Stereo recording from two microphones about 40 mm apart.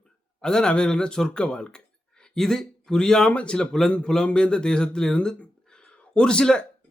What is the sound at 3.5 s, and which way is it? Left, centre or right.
Speech, centre.